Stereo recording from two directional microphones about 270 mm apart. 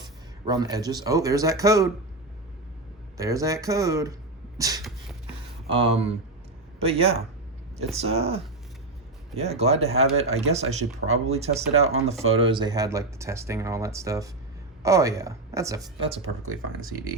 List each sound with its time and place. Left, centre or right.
0.0 s speech: centre
3.2 s speech: centre
4.5 s sneeze: centre
5.6 s speech: centre
16.2 s speech: right